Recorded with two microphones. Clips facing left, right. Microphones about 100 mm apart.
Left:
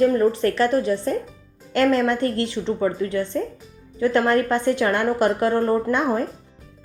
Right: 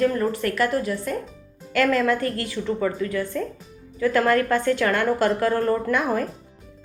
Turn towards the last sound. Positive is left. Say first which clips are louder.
# left 2 dB
turn(degrees=25)  # may be behind; listen again after turning